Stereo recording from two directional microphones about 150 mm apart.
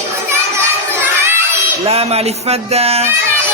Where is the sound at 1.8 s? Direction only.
40° right (ahead or behind).